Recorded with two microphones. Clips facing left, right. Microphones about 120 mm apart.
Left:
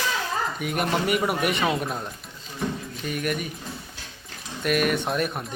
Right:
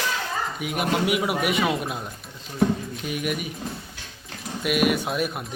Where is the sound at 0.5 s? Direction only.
Centre (ahead or behind).